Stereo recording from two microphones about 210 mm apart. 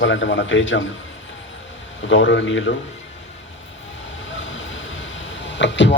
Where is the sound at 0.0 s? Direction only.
60° left (ahead or behind).